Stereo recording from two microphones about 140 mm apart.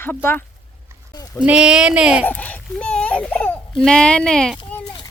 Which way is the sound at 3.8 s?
5° left (ahead or behind).